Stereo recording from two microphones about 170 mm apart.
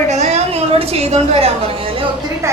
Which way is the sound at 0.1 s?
40° right (ahead or behind).